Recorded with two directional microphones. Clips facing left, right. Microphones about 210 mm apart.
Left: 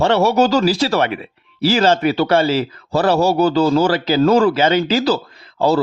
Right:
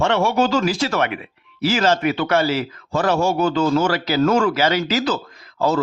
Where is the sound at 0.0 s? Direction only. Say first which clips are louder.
Left 4 dB; 40° left (ahead or behind).